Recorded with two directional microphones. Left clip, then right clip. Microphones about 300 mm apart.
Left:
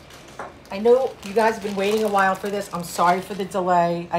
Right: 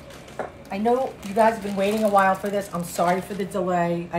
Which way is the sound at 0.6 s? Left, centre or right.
Centre.